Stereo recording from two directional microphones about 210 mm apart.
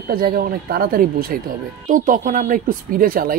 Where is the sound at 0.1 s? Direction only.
45° right (ahead or behind).